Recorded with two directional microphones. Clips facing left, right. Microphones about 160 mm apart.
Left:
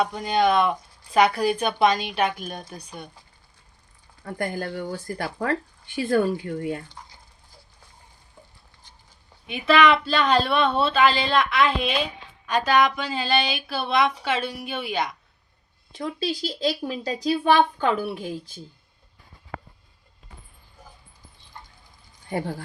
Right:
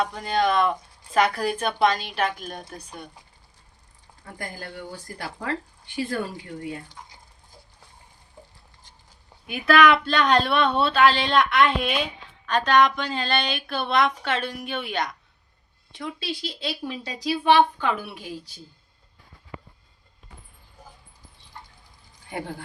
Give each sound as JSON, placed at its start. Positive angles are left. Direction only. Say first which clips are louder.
{"t": 0.0, "sound": "speech", "louder": "left 2 dB", "side_deg": 0}
{"t": 4.4, "sound": "speech", "louder": "left 8 dB", "side_deg": 55}
{"t": 9.5, "sound": "speech", "louder": "even", "side_deg": 0}
{"t": 16.0, "sound": "speech", "louder": "left 4 dB", "side_deg": 40}